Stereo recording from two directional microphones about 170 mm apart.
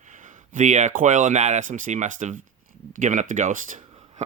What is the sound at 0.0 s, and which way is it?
Speech, 45° right (ahead or behind).